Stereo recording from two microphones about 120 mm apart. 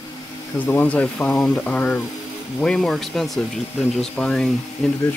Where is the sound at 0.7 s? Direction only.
10° left (ahead or behind).